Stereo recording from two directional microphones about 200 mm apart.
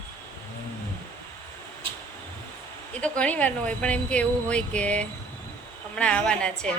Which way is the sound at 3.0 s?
5° left (ahead or behind).